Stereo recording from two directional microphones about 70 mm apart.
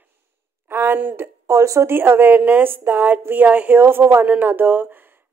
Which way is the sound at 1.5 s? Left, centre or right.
Right.